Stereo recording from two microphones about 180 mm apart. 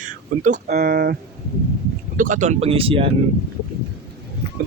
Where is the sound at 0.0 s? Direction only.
45° right (ahead or behind).